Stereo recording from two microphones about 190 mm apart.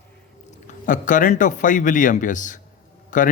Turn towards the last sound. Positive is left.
turn(degrees=45)  # may be behind; listen again after turning